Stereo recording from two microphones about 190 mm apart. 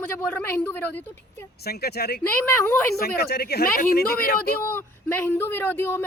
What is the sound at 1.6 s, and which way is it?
A man's voice, 55° left (ahead or behind).